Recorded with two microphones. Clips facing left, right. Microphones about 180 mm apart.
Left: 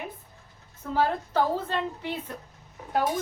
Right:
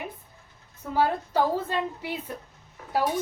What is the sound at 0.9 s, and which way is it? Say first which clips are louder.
A woman's voice: right 1 dB; 10° right (ahead or behind).